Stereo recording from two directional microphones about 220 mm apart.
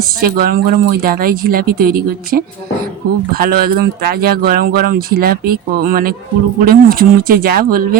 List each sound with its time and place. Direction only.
0.2 s speech: 40° right (ahead or behind)